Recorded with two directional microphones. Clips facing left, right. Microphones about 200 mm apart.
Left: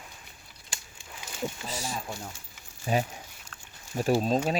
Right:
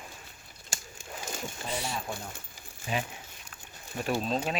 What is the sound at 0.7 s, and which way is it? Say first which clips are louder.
Crumpling: right 4 dB; 45° right (ahead or behind).